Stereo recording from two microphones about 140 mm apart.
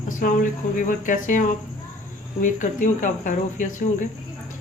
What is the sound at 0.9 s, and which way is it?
Speech, 70° left (ahead or behind).